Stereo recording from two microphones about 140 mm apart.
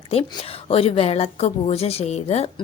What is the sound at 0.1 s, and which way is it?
A woman's voice, 45° left (ahead or behind).